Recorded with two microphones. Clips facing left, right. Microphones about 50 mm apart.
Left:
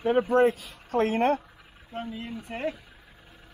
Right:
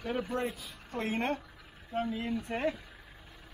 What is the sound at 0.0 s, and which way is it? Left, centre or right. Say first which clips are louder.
Speech: left 12 dB; left.